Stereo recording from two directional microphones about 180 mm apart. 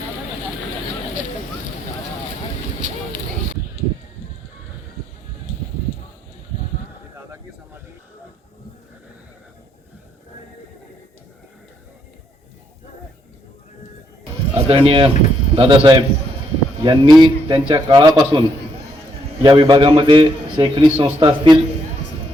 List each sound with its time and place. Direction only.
14.5 s a man's voice: 30° right (ahead or behind)